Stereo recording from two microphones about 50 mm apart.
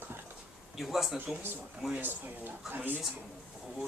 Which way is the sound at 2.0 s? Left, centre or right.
Right.